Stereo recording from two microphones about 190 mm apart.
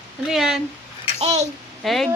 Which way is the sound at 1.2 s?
35° right (ahead or behind).